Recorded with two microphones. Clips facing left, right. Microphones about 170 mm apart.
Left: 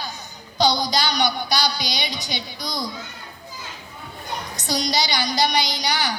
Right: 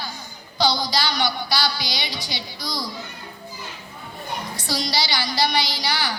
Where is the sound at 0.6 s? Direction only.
20° left (ahead or behind).